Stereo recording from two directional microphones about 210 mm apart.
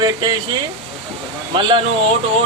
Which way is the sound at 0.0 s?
20° right (ahead or behind).